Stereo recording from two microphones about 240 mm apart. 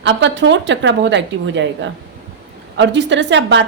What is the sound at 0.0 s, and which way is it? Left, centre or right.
A woman's voice, right.